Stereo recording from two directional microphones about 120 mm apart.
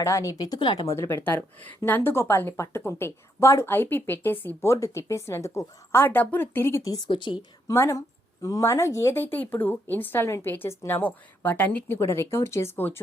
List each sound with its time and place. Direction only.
0.0 s speech: 25° left (ahead or behind)
0.9 s a woman's voice: 20° left (ahead or behind)
6.9 s speech: 40° left (ahead or behind)
7.7 s a woman's voice: 25° left (ahead or behind)